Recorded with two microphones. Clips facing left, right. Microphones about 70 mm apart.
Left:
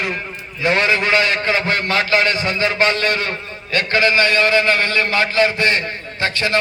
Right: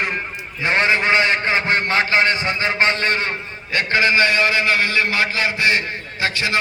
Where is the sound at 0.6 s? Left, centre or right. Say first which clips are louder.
Left 1 dB; right.